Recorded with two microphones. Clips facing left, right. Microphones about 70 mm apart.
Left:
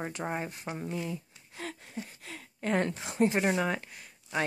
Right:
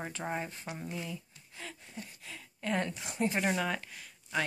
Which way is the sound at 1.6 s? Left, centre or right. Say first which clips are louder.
Left 6 dB; left.